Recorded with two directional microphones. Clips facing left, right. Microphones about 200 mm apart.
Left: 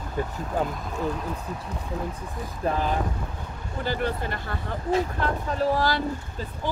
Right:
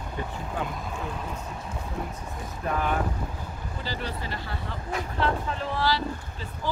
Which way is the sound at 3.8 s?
55° left (ahead or behind).